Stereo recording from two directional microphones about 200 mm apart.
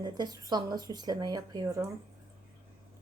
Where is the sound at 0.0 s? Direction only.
20° right (ahead or behind).